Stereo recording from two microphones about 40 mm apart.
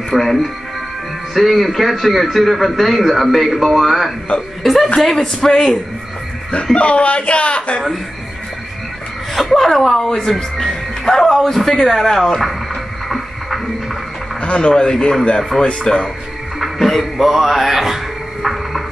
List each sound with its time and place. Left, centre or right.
0.1 s a man's voice: centre
4.3 s speech: left
5.0 s speech: centre
6.5 s speech: left
9.3 s a man's voice: centre
14.4 s a man's voice: left
16.5 s music: centre